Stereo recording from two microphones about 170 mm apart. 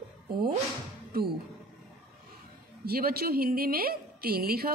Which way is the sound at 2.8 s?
65° right (ahead or behind).